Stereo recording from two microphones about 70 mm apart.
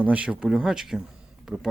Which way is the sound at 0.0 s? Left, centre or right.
Centre.